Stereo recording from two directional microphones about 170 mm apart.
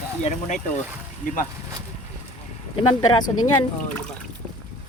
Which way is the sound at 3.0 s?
20° left (ahead or behind).